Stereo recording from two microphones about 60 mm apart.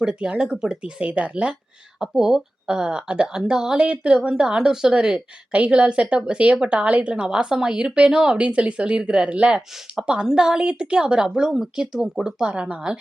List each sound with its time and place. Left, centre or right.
0.0 s speech: centre
2.1 s speech: centre